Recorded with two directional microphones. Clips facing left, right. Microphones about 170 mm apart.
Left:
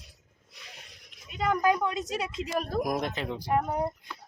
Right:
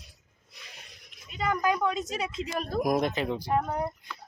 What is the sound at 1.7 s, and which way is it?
A woman's voice, 5° left (ahead or behind).